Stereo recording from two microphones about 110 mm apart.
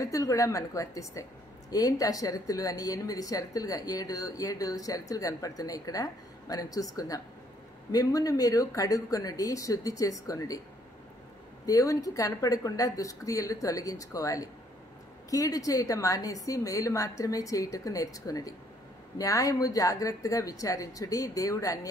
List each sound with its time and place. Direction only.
0.0 s a woman's voice: 30° left (ahead or behind)
11.6 s speech: 30° left (ahead or behind)